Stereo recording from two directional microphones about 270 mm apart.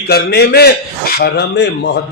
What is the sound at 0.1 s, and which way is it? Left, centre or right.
A man's voice, left.